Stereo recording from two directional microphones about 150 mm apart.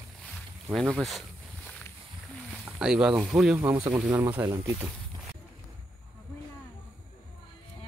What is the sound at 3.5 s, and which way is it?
Speech, 20° right (ahead or behind).